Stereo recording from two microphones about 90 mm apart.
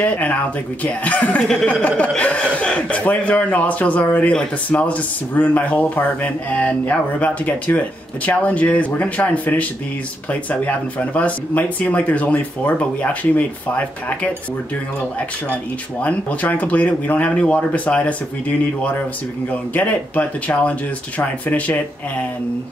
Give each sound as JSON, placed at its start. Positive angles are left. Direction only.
{"t": 0.0, "sound": "speech", "side_deg": 15}
{"t": 19.7, "sound": "speech", "side_deg": 15}